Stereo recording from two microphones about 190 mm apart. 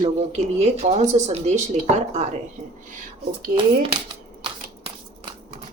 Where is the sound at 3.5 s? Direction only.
25° right (ahead or behind).